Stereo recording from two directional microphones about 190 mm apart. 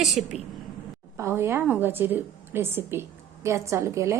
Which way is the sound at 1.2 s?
15° right (ahead or behind).